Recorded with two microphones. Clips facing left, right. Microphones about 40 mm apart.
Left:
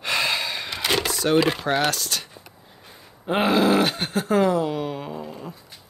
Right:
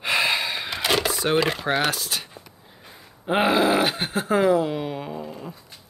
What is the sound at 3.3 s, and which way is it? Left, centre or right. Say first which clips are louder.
Speech: even; centre.